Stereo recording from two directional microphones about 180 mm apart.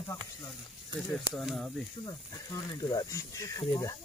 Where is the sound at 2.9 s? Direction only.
20° left (ahead or behind).